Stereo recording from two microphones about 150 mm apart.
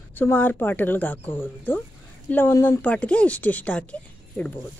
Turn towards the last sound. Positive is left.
turn(degrees=10)  # may be behind; listen again after turning